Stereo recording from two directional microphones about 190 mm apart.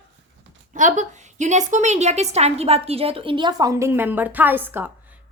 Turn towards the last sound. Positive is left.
turn(degrees=-10)  # may be behind; listen again after turning